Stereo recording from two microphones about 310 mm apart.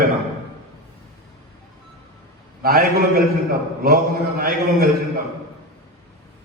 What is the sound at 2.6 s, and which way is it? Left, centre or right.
A man's voice, right.